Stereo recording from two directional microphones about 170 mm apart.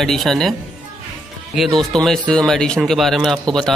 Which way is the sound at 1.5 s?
Centre (ahead or behind).